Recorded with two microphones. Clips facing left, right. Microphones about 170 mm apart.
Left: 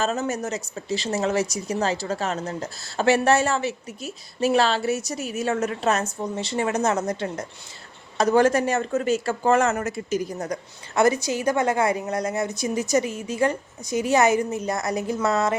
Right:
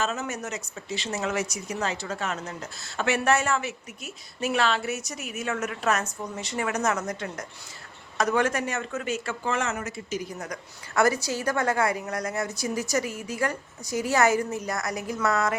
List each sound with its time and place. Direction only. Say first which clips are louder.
0.0 s speech: left 5 dB; 35° left (ahead or behind)
10.3 s a woman's voice: left 7 dB; 30° left (ahead or behind)